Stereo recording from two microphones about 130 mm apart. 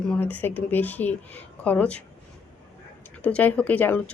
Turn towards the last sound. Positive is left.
turn(degrees=10)  # may be behind; listen again after turning